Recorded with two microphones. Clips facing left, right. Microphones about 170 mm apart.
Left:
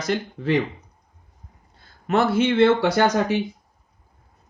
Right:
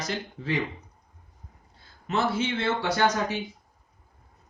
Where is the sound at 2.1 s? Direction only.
65° left (ahead or behind).